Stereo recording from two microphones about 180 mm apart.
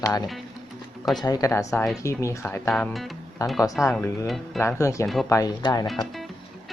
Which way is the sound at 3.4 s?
20° left (ahead or behind).